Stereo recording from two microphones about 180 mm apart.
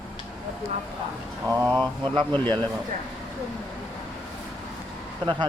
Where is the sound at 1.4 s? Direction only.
20° right (ahead or behind).